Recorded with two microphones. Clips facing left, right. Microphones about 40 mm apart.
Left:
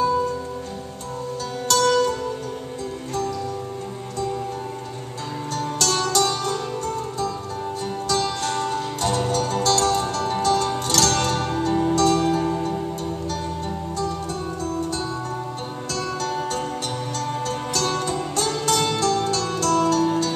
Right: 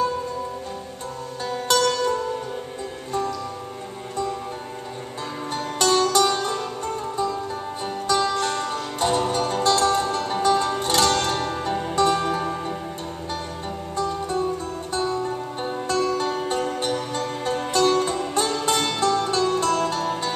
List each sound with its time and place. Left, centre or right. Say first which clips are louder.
1.7 s music: left 2 dB; centre
5.8 s music: right 3 dB; centre
8.1 s music: right 3 dB; right
13.9 s music: right 5 dB; centre
15.9 s music: right 3 dB; right